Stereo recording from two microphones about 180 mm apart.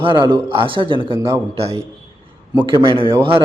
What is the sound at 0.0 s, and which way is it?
A man's voice, 25° right (ahead or behind).